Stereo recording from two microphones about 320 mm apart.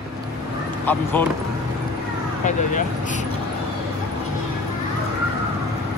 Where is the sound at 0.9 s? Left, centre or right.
Centre.